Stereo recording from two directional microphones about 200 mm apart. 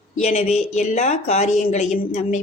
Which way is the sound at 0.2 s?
35° left (ahead or behind).